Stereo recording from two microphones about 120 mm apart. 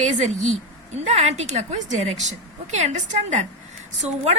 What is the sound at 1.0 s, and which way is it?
A woman's voice, 70° right (ahead or behind).